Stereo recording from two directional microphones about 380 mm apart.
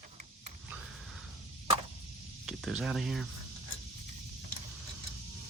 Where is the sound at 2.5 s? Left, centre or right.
Centre.